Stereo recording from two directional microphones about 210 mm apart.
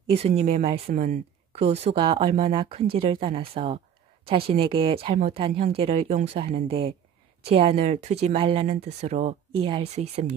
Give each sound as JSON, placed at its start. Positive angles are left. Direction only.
{"t": 0.4, "sound": "speech", "side_deg": -30}